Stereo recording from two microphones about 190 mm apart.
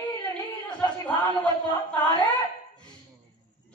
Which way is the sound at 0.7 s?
5° left (ahead or behind).